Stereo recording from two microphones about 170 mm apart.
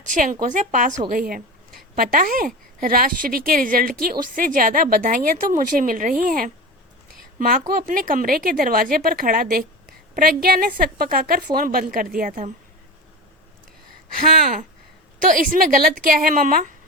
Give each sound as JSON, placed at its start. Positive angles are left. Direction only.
{"t": 0.1, "sound": "a woman's voice", "side_deg": -50}
{"t": 15.2, "sound": "speech", "side_deg": -55}